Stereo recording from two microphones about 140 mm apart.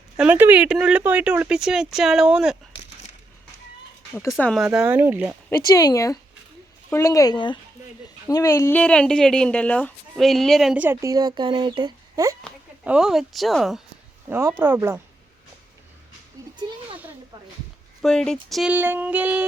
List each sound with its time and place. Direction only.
0.2 s speech: 15° right (ahead or behind)
4.4 s speech: 10° left (ahead or behind)
4.6 s speech: 5° right (ahead or behind)
5.6 s speech: 25° left (ahead or behind)
8.3 s speech: 25° left (ahead or behind); by 10.8 s centre (ahead or behind)
10.8 s speech: 25° right (ahead or behind)
12.8 s speech: 5° right (ahead or behind)
14.3 s speech: 15° right (ahead or behind)
16.6 s a sound: 35° right (ahead or behind)
18.0 s speech: 5° left (ahead or behind)
18.7 s speech: 15° right (ahead or behind)